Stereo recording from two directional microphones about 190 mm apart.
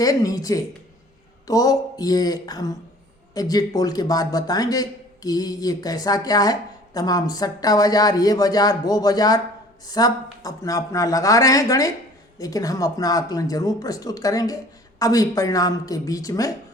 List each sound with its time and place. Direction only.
0.0 s speech: 20° left (ahead or behind)